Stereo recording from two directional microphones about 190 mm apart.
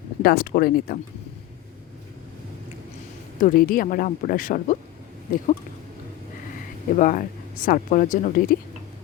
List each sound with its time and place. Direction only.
0.2 s speech: 50° left (ahead or behind)
3.4 s speech: 50° left (ahead or behind)
6.9 s speech: 45° left (ahead or behind)